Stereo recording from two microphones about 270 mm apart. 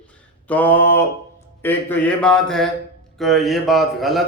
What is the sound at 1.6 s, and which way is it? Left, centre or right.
A man's voice, centre.